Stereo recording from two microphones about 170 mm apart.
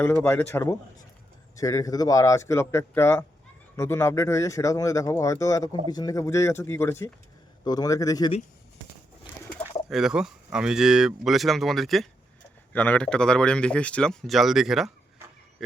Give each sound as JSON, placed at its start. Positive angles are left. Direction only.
{"t": 0.0, "sound": "speech", "side_deg": 10}
{"t": 9.9, "sound": "speech", "side_deg": -5}